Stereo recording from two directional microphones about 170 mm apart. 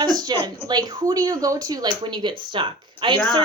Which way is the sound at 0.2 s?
25° right (ahead or behind).